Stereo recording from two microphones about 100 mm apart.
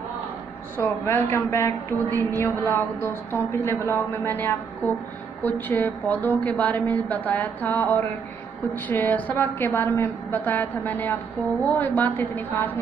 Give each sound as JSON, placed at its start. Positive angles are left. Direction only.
{"t": 0.8, "sound": "a woman's voice", "side_deg": 25}
{"t": 5.4, "sound": "music", "side_deg": 20}
{"t": 8.8, "sound": "a woman's voice", "side_deg": 15}